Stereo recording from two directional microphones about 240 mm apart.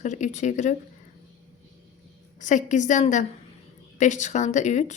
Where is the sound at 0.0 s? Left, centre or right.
Left.